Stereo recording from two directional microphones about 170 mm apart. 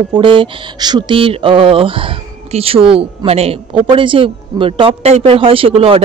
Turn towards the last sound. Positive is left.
turn(degrees=-35)  # may be behind; listen again after turning